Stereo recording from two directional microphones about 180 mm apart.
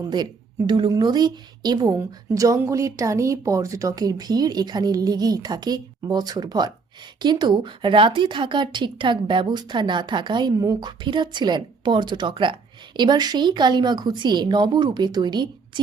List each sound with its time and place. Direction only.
0.7 s a woman's voice: 25° right (ahead or behind)